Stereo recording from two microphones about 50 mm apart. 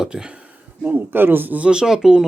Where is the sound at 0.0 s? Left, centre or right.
Centre.